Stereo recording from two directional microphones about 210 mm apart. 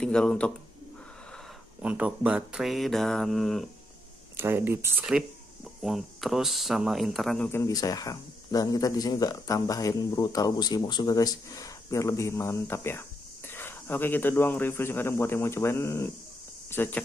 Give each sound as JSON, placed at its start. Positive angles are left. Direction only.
{"t": 0.0, "sound": "speech", "side_deg": 5}
{"t": 4.4, "sound": "speech", "side_deg": -10}